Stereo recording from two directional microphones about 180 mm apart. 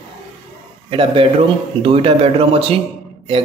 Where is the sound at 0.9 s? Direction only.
30° right (ahead or behind).